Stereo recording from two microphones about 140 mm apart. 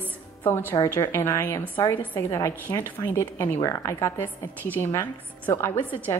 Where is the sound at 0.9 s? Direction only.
20° left (ahead or behind).